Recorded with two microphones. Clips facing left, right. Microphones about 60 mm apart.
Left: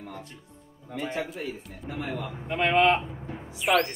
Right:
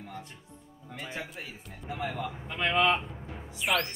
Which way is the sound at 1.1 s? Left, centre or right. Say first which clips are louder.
Left 7 dB; centre.